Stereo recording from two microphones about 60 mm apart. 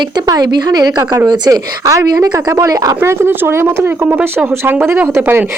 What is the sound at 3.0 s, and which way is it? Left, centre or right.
Speech, right.